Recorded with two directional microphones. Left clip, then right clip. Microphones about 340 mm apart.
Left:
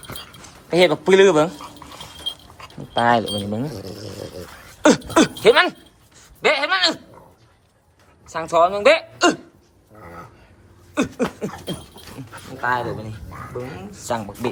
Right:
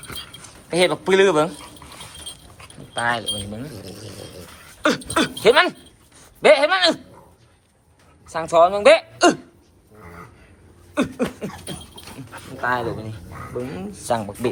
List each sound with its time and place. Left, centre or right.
0.7 s speech: centre
2.9 s speech: centre
4.4 s speech: centre
8.3 s a woman's voice: centre
10.9 s a sound: centre
12.3 s speech: centre